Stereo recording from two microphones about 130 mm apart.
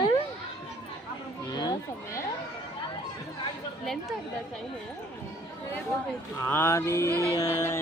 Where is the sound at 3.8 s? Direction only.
Centre (ahead or behind).